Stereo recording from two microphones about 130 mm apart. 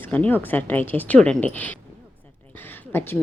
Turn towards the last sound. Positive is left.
turn(degrees=15)  # may be behind; listen again after turning